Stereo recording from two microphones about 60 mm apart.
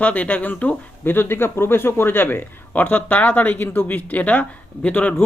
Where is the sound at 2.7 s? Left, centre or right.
Left.